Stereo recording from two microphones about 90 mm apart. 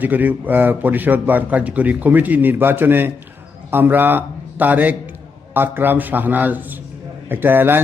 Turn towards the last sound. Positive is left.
turn(degrees=-20)  # may be behind; listen again after turning